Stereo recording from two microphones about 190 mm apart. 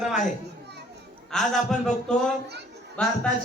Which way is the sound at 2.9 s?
5° left (ahead or behind).